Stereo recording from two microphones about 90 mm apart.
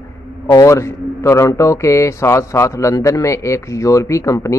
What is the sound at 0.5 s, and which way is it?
A man's voice, 35° left (ahead or behind).